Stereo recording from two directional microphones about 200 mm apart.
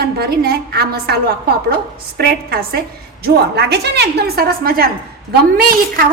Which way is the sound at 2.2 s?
50° right (ahead or behind).